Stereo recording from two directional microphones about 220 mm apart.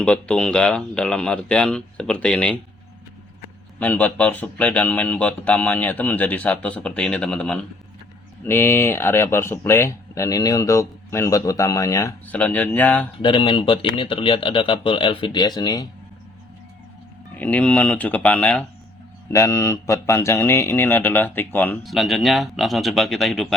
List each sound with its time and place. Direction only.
0.0 s speech: 5° left (ahead or behind)
3.8 s speech: 5° left (ahead or behind)
13.2 s speech: 25° left (ahead or behind)
17.3 s speech: 5° left (ahead or behind)